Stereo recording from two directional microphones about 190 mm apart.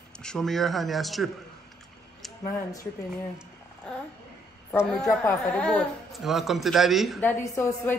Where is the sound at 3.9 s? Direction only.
5° left (ahead or behind).